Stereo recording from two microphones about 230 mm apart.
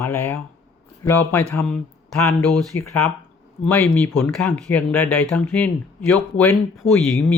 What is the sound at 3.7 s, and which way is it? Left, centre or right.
Speech, centre.